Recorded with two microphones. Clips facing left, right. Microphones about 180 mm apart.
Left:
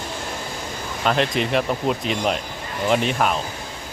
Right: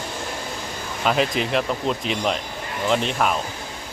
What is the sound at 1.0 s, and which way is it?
Speech, 5° right (ahead or behind).